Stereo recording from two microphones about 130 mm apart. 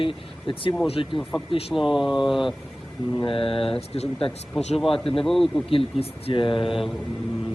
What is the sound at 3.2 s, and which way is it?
Speech, 45° left (ahead or behind).